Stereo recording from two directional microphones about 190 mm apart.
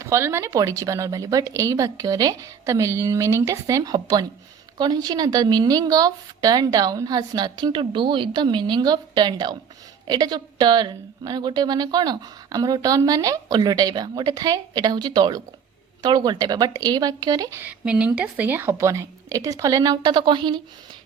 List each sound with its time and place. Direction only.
0.0 s a woman's voice: 15° right (ahead or behind)
17.7 s a woman's voice: 5° right (ahead or behind); by 20.6 s 25° right (ahead or behind)